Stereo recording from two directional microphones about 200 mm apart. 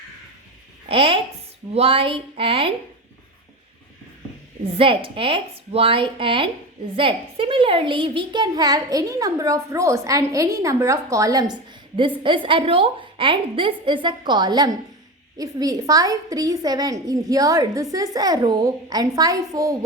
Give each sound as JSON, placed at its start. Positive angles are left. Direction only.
{"t": 0.9, "sound": "a woman's voice", "side_deg": -30}
{"t": 4.6, "sound": "a woman's voice", "side_deg": -30}